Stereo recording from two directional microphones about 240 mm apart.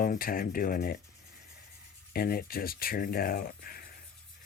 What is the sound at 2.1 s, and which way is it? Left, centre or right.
Speech, left.